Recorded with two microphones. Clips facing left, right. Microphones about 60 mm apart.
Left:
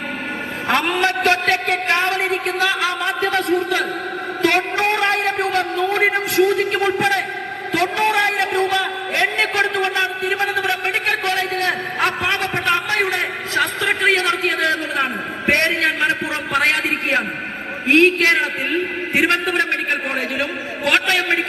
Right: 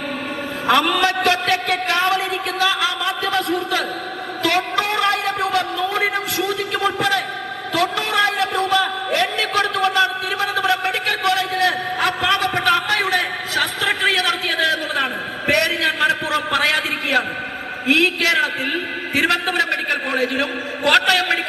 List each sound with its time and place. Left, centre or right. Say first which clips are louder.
0.7 s a man's voice: right 2 dB; left
4.4 s a sound: left 2 dB; left
17.8 s a man's voice: left 4 dB; left